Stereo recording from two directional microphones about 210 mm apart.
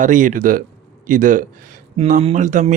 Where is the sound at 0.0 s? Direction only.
40° right (ahead or behind).